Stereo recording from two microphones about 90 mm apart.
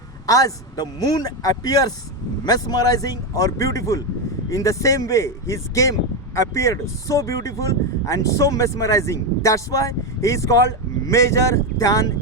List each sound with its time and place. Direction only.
0.3 s speech: 40° left (ahead or behind)